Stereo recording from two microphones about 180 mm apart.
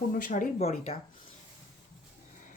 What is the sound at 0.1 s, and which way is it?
Speech, 45° left (ahead or behind).